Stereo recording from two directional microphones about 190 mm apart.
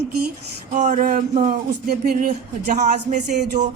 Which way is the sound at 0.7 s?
40° right (ahead or behind).